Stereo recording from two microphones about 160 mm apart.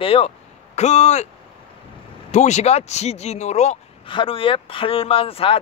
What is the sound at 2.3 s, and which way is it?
A man's voice, 45° left (ahead or behind).